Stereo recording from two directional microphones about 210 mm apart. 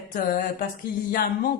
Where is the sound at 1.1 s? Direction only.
45° left (ahead or behind).